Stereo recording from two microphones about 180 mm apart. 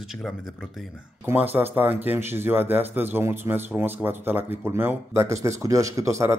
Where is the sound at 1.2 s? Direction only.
10° right (ahead or behind).